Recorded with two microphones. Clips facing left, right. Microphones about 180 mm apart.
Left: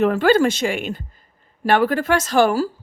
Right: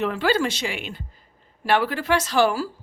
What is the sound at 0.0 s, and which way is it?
Speech, 50° left (ahead or behind).